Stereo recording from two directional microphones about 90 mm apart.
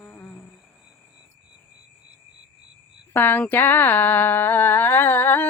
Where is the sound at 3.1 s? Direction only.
20° left (ahead or behind).